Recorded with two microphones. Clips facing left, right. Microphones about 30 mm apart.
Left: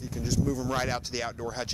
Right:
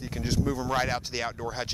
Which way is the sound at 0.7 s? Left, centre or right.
Centre.